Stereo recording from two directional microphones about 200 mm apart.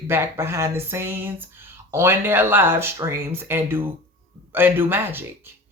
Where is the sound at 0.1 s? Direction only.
10° right (ahead or behind).